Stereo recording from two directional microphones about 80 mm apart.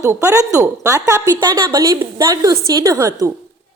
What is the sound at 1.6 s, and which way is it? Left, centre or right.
Speech, right.